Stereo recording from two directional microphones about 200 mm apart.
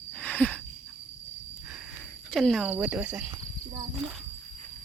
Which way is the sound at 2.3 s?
Centre (ahead or behind).